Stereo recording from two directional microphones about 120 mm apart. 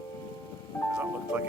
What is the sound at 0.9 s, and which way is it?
Music, 15° right (ahead or behind).